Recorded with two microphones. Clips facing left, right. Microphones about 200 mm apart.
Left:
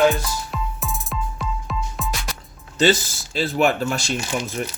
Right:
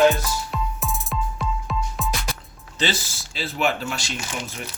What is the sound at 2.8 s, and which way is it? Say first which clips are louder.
Speech: left 8 dB; 45° left (ahead or behind).